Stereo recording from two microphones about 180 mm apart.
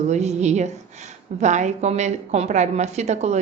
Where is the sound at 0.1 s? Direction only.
40° right (ahead or behind).